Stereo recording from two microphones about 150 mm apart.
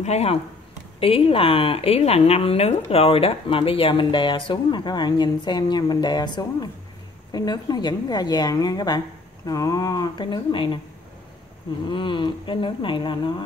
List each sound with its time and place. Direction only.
0.0 s a woman's voice: 45° left (ahead or behind)
11.9 s a woman's voice: 30° left (ahead or behind)